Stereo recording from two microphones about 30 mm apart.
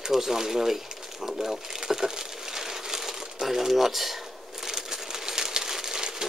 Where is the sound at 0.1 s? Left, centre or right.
Centre.